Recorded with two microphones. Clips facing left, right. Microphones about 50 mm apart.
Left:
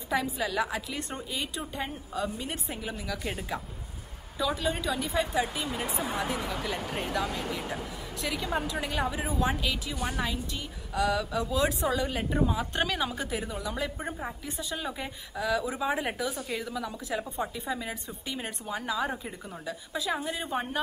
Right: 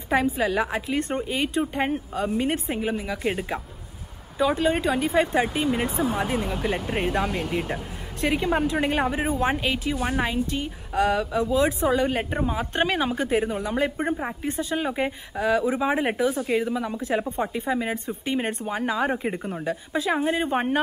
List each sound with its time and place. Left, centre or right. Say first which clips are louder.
0.1 s speech: right 7 dB; right